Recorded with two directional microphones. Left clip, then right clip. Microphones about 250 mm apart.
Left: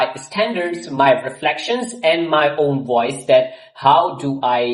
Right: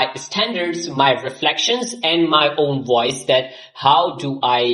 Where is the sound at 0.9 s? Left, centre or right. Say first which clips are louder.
Left 2 dB; right.